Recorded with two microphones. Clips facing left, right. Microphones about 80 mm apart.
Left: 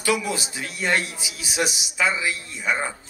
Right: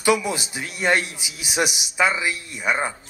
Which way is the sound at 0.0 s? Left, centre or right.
Right.